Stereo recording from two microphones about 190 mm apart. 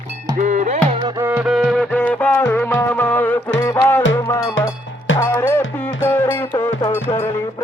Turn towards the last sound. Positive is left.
turn(degrees=15)  # may be behind; listen again after turning